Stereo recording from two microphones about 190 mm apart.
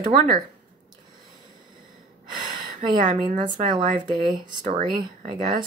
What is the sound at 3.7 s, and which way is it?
Speech, 25° right (ahead or behind).